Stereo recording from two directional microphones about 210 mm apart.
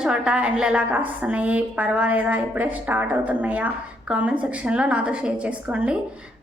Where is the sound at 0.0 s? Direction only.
5° right (ahead or behind).